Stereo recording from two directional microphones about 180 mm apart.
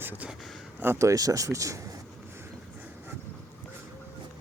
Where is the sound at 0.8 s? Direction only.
15° right (ahead or behind).